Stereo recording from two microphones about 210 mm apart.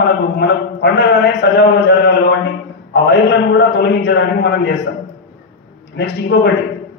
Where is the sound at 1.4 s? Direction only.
55° left (ahead or behind).